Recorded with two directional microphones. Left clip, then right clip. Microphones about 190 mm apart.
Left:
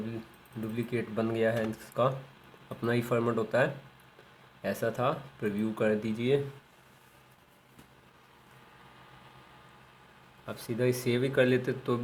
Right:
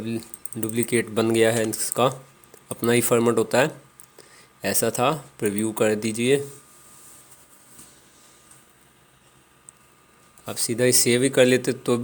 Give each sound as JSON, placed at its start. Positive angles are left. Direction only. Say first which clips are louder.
{"t": 0.6, "sound": "speech", "louder": "right 10 dB", "side_deg": -55}
{"t": 10.4, "sound": "speech", "louder": "right 8 dB", "side_deg": -45}